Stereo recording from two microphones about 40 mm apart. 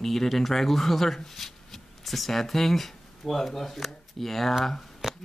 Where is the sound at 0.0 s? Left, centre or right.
Centre.